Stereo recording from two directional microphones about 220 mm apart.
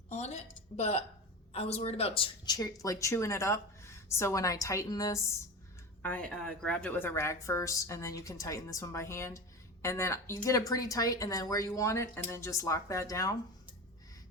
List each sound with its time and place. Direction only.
0.1 s a woman's voice: 30° left (ahead or behind)